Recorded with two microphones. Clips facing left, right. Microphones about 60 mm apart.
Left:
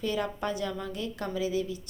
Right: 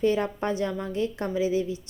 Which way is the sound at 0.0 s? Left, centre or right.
Right.